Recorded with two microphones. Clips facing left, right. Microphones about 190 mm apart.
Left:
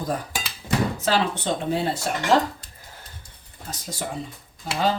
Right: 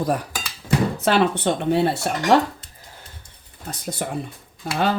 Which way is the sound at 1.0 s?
60° right (ahead or behind).